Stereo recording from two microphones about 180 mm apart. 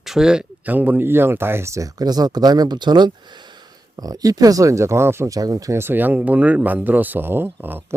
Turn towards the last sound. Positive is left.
turn(degrees=-10)  # may be behind; listen again after turning